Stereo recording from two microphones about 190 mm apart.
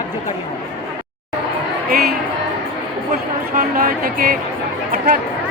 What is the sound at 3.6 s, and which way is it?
Speech, 50° right (ahead or behind).